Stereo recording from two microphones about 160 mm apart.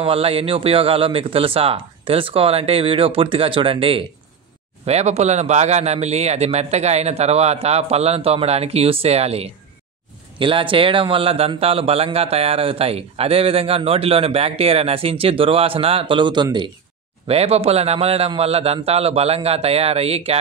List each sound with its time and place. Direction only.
0.0 s a man's voice: 35° right (ahead or behind)
17.3 s a man's voice: 40° right (ahead or behind)